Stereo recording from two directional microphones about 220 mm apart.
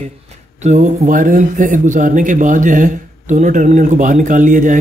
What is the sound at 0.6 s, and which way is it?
Speech, 30° right (ahead or behind).